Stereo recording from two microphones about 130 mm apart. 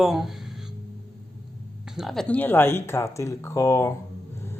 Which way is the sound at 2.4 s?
15° left (ahead or behind).